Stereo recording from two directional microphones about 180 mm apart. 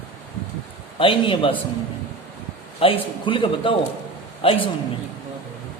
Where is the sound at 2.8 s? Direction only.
30° left (ahead or behind).